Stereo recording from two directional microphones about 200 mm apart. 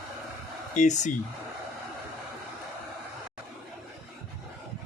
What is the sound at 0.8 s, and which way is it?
Speech, 35° left (ahead or behind).